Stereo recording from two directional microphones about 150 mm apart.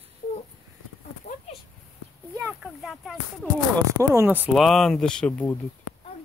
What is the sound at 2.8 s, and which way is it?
Speech, centre (ahead or behind).